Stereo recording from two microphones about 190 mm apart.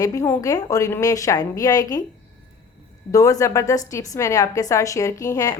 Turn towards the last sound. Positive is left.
turn(degrees=15)  # may be behind; listen again after turning